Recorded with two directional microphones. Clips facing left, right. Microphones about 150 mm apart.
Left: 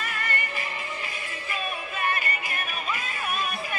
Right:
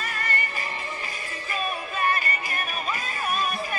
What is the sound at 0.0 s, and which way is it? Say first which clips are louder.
Music: right 1 dB; 35° right (ahead or behind).